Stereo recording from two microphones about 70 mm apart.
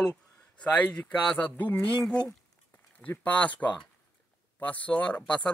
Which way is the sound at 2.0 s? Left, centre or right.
Centre.